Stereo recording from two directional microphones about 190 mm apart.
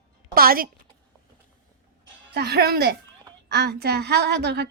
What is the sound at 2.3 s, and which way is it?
Speech, 60° right (ahead or behind).